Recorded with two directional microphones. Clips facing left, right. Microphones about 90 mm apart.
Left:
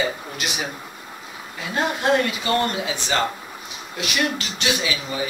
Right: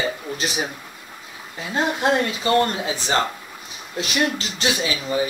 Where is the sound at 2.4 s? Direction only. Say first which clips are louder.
Right 5 dB; 30° right (ahead or behind).